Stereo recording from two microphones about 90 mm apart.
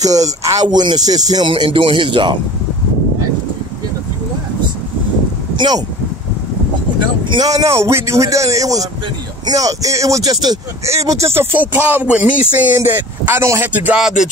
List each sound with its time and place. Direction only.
0.0 s speech: 40° right (ahead or behind)
0.7 s speech: 50° right (ahead or behind)
1.5 s speech: 70° right (ahead or behind)
7.0 s vehicle: 55° right (ahead or behind)
7.5 s a man's voice: 35° right (ahead or behind)
10.9 s a man's voice: 35° right (ahead or behind)
11.5 s speech: 20° right (ahead or behind)
13.9 s music: 5° right (ahead or behind)